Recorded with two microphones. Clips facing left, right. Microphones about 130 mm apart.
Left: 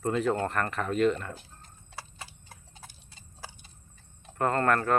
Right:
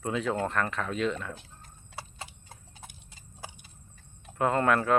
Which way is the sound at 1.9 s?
25° right (ahead or behind).